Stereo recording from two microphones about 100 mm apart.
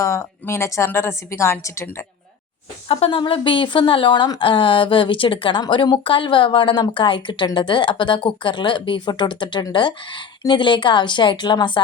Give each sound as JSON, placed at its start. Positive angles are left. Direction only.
{"t": 0.0, "sound": "a woman's voice", "side_deg": 30}
{"t": 2.9, "sound": "speech", "side_deg": 65}